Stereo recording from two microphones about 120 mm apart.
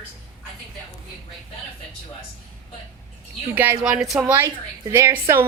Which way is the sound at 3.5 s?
15° right (ahead or behind).